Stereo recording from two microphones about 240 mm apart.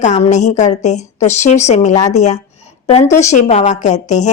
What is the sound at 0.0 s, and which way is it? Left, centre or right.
A woman's voice, left.